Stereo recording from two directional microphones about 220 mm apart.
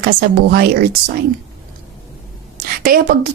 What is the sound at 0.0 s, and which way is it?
Speech, 45° right (ahead or behind).